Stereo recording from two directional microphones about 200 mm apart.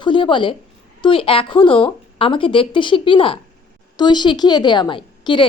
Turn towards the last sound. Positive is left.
turn(degrees=25)  # may be behind; listen again after turning